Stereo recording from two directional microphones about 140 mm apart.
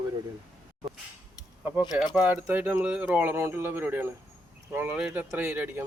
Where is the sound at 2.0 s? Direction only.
5° right (ahead or behind).